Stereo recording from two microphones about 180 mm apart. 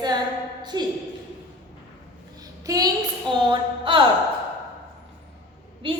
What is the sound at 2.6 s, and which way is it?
Speech, 20° right (ahead or behind).